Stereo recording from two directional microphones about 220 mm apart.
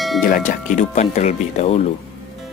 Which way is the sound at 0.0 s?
Centre (ahead or behind).